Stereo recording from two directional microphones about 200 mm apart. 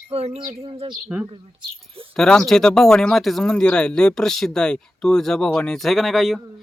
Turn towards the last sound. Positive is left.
turn(degrees=0)  # may be behind; listen again after turning